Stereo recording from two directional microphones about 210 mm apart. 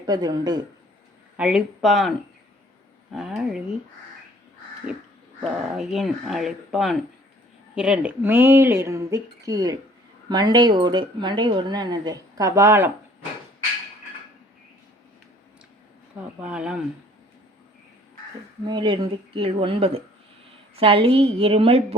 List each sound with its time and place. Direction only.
0.0 s speech: 20° right (ahead or behind)
1.4 s speech: 5° right (ahead or behind)
5.7 s speech: centre (ahead or behind)
16.4 s speech: 5° right (ahead or behind)
18.7 s speech: 20° right (ahead or behind)